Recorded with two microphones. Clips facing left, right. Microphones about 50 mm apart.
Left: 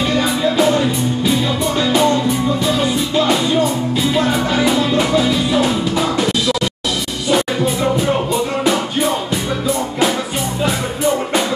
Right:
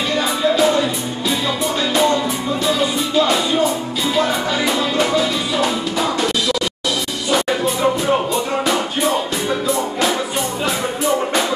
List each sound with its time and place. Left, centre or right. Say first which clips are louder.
0.2 s music: right 2 dB; centre
4.3 s music: left 3 dB; centre